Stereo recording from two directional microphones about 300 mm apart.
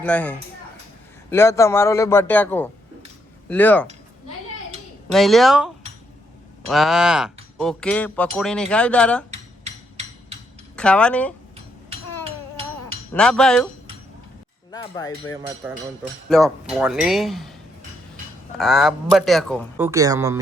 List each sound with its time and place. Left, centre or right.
0.0 s a man's voice: centre
5.1 s speech: centre
10.8 s speech: centre
11.5 s a sound: centre
13.1 s speech: centre
14.7 s cutlery: centre
15.6 s speech: centre
19.7 s speech: centre